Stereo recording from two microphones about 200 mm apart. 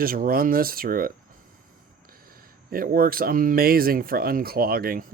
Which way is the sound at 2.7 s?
45° right (ahead or behind).